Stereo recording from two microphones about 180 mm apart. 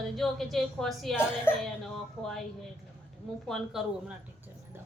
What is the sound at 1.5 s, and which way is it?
Speech, 10° left (ahead or behind).